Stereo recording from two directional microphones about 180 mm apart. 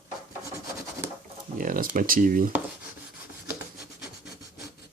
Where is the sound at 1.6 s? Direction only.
50° right (ahead or behind).